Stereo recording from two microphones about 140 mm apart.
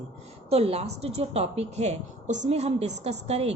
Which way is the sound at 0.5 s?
45° right (ahead or behind).